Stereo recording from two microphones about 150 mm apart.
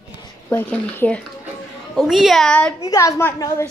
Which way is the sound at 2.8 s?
20° left (ahead or behind).